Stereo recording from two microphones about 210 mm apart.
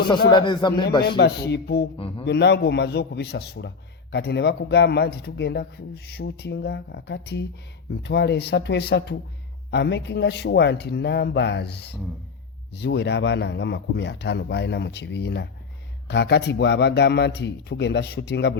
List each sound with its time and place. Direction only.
0.3 s speech: 20° left (ahead or behind)
1.0 s speech: 50° left (ahead or behind)
2.0 s a man's voice: 25° left (ahead or behind)
2.2 s speech: 55° left (ahead or behind)